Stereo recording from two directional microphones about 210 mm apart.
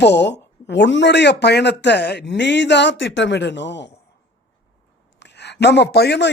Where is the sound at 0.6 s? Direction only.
60° left (ahead or behind).